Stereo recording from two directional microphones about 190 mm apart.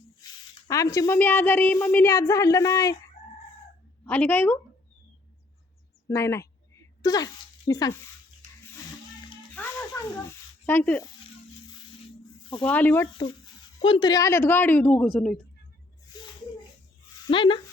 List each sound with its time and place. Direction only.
0.7 s a woman's voice: 15° left (ahead or behind)
4.0 s a woman's voice: 10° left (ahead or behind)
6.1 s a sound: 15° left (ahead or behind)
9.5 s music: 10° left (ahead or behind)
10.7 s a woman's voice: 10° left (ahead or behind)
12.6 s a woman's voice: 10° left (ahead or behind)
13.8 s a woman's voice: 25° left (ahead or behind); by 15.4 s centre (ahead or behind)
16.1 s a sound: 20° left (ahead or behind)
17.2 s speech: 25° left (ahead or behind)